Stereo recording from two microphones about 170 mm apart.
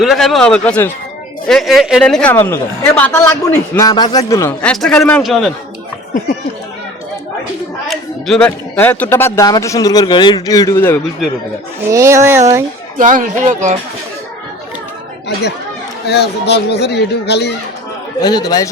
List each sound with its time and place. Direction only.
0.0 s a man's voice: centre (ahead or behind); by 4.5 s 20° left (ahead or behind)
4.6 s a man's voice: 5° left (ahead or behind)
7.9 s a man's voice: 5° left (ahead or behind)
11.9 s a sound: 15° right (ahead or behind)
13.0 s speech: 50° right (ahead or behind)
16.0 s speech: 75° left (ahead or behind)
18.2 s a man's voice: 25° left (ahead or behind)